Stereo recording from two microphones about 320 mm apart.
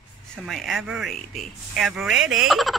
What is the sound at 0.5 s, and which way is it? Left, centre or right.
Speech, centre.